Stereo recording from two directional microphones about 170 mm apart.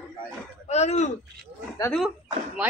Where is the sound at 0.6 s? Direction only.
40° left (ahead or behind).